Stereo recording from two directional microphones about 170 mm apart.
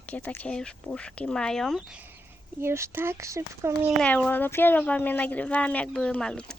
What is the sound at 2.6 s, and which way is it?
Speech, 15° right (ahead or behind).